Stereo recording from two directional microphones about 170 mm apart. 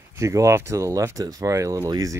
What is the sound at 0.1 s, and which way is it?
Speech, 20° right (ahead or behind).